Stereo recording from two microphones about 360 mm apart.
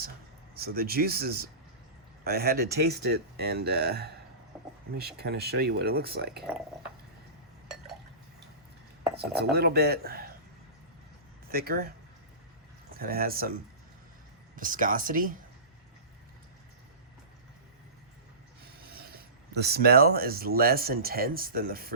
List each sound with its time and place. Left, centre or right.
0.5 s speech: right
4.5 s vehicle: centre
4.9 s speech: right
9.1 s speech: right
11.4 s speech: right
12.9 s speech: right
14.5 s speech: right
18.6 s speech: right